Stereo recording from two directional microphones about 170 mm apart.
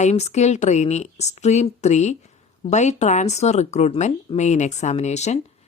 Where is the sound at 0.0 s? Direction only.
40° left (ahead or behind).